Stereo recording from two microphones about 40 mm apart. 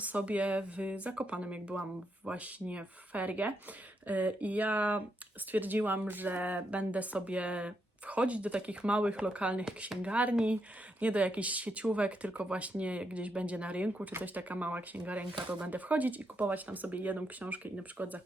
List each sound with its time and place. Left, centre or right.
0.0 s speech: right